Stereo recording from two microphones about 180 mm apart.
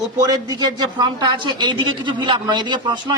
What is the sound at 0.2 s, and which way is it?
A man's voice, 20° right (ahead or behind).